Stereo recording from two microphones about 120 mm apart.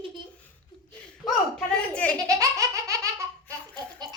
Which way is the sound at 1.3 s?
5° left (ahead or behind).